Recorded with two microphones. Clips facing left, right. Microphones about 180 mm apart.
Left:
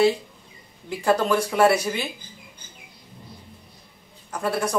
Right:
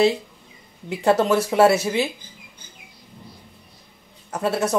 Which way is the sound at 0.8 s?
25° right (ahead or behind).